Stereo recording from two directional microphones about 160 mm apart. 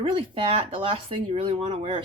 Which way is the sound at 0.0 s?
35° right (ahead or behind).